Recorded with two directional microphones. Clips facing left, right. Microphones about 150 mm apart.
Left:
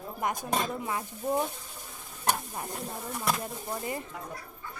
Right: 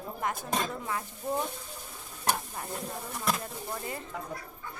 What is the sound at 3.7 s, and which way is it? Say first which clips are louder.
Speech: left 4 dB; 20° left (ahead or behind).